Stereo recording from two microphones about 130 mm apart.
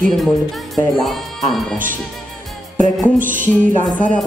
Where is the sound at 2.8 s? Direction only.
90° right.